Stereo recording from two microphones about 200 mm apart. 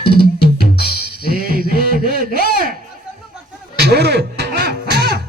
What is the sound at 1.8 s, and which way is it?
Speech, 45° right (ahead or behind).